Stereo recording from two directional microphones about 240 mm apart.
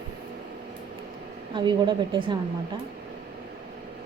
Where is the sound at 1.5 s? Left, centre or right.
Centre.